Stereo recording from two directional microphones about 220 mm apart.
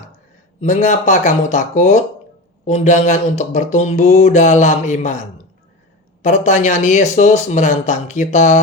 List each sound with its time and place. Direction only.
0.6 s speech: 35° left (ahead or behind)
6.2 s speech: 35° left (ahead or behind)